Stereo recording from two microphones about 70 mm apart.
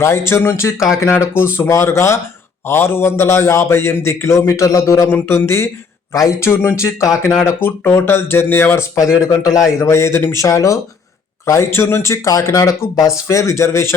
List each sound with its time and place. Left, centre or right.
0.0 s speech: left
5.1 s speech: left
9.2 s speech: left
9.8 s speech: left
10.4 s speech: left